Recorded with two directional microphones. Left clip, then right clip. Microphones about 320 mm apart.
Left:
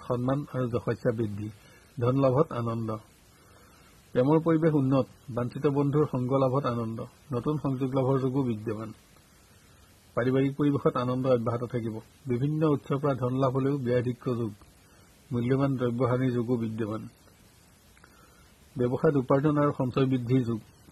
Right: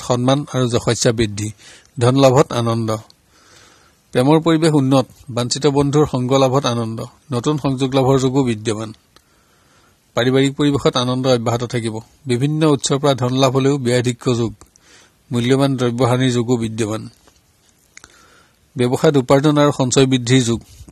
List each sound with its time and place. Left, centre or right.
0.0 s a man's voice: right
4.1 s a man's voice: right
10.1 s a man's voice: right
18.9 s a man's voice: right